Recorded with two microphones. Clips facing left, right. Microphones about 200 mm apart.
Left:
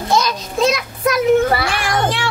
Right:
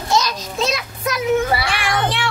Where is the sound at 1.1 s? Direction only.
50° left (ahead or behind).